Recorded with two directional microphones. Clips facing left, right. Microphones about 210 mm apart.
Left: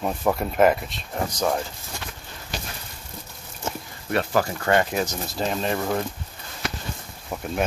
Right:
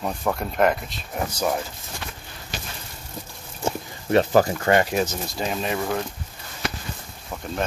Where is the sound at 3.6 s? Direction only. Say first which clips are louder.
Right 5 dB; 25° right (ahead or behind).